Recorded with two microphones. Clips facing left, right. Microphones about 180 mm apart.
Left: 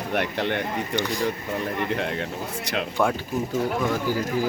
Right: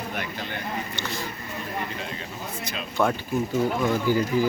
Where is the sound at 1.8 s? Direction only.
70° left (ahead or behind).